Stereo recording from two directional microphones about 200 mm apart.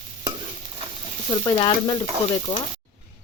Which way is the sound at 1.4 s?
20° left (ahead or behind).